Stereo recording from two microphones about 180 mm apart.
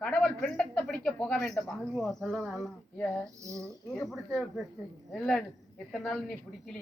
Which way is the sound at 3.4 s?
15° right (ahead or behind).